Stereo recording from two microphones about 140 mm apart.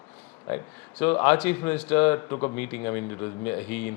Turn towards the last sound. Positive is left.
turn(degrees=10)  # may be behind; listen again after turning